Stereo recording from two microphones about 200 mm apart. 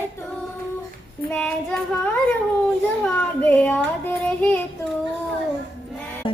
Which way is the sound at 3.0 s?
5° left (ahead or behind).